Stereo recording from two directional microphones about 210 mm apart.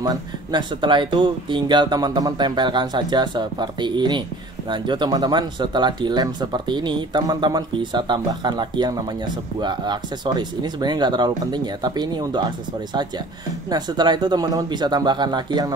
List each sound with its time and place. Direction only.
0.0 s speech: 20° right (ahead or behind)